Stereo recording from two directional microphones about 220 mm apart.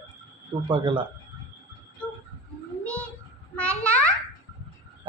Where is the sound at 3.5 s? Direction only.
5° left (ahead or behind).